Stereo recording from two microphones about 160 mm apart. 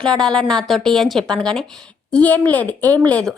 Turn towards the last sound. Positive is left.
turn(degrees=5)  # may be behind; listen again after turning